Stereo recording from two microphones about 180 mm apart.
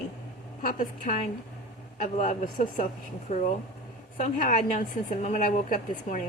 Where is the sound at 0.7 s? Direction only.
45° left (ahead or behind).